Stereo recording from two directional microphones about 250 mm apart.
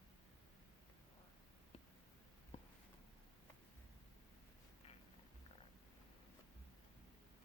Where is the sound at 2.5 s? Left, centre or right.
Left.